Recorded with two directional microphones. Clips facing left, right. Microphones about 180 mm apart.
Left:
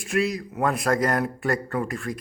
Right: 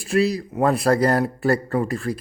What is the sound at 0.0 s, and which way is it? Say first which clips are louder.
A man's voice: right 5 dB; 35° right (ahead or behind).